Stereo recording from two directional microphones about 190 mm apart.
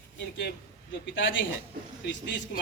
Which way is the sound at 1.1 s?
75° left (ahead or behind).